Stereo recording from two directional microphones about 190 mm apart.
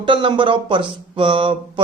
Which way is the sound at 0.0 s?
25° right (ahead or behind).